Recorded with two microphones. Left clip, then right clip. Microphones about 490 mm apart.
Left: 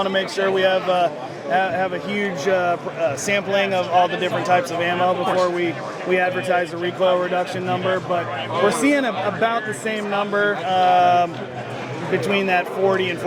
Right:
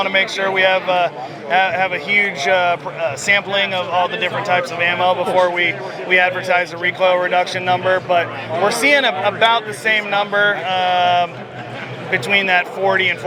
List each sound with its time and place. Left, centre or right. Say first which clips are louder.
0.0 s a man's voice: right 4 dB; right